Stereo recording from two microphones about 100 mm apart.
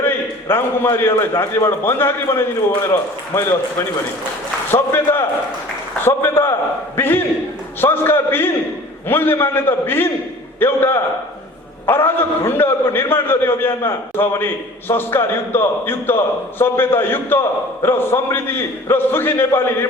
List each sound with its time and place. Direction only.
0.0 s a man's voice: 20° left (ahead or behind)
4.7 s a man's voice: 25° left (ahead or behind)